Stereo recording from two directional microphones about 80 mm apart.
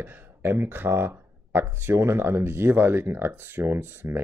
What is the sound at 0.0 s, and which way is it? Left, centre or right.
Speech, right.